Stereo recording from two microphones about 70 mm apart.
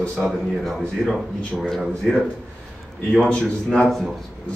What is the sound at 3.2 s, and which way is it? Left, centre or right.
Speech, centre.